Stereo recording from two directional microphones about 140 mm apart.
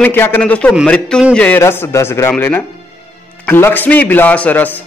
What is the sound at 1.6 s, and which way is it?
A man's voice, 15° left (ahead or behind).